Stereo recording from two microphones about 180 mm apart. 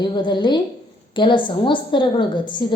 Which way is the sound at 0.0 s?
25° left (ahead or behind).